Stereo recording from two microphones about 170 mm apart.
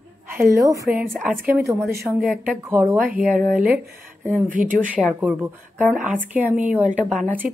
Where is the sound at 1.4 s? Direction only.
15° right (ahead or behind).